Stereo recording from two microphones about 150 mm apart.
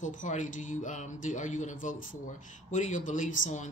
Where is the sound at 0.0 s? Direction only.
60° left (ahead or behind).